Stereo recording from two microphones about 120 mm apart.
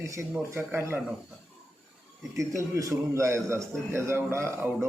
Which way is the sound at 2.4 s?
25° right (ahead or behind).